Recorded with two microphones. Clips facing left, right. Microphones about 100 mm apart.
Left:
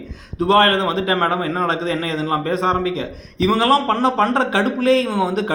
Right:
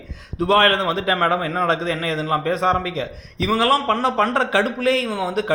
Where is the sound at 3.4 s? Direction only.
30° left (ahead or behind).